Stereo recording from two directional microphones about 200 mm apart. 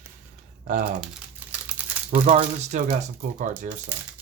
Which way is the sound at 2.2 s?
35° right (ahead or behind).